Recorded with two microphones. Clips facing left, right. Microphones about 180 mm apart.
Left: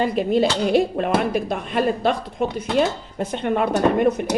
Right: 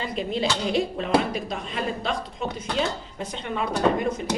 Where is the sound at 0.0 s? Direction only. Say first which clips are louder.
Left 8 dB; 55° left (ahead or behind).